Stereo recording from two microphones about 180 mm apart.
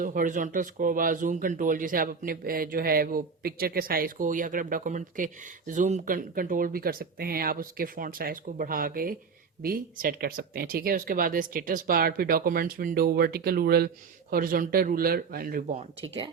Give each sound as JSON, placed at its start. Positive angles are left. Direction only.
{"t": 0.0, "sound": "speech", "side_deg": -50}